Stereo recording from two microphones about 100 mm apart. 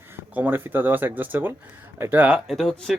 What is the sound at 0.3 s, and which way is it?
Speech, 20° right (ahead or behind).